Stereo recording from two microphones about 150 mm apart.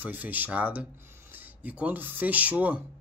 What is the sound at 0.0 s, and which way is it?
Speech, 10° right (ahead or behind).